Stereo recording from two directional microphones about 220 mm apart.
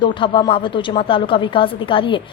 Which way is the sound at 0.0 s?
20° left (ahead or behind).